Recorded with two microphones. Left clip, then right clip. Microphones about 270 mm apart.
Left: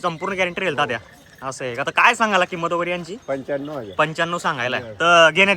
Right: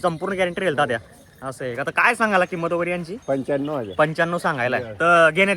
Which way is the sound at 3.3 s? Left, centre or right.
Right.